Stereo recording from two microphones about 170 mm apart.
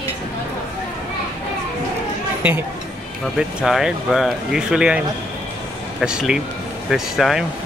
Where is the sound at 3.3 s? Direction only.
Centre (ahead or behind).